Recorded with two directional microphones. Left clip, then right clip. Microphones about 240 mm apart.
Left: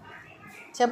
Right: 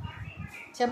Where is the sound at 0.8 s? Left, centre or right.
Centre.